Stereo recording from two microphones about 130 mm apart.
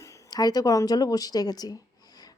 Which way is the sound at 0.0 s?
25° left (ahead or behind).